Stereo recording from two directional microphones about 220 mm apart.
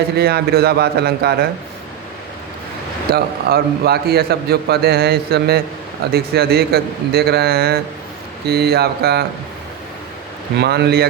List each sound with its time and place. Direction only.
0.2 s a man's voice: 45° right (ahead or behind)
3.1 s a man's voice: 45° right (ahead or behind)
10.6 s a man's voice: 50° right (ahead or behind)